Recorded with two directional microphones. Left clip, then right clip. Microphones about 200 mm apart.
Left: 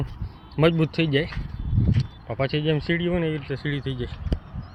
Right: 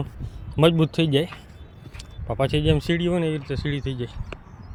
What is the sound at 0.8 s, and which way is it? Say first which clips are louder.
Speech: right 1 dB; 90° right.